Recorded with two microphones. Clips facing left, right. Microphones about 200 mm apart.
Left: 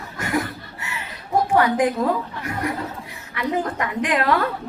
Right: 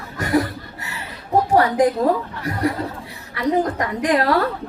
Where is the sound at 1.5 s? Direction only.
35° right (ahead or behind).